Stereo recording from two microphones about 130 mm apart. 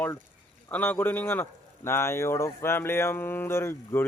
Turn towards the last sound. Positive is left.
turn(degrees=20)  # may be behind; listen again after turning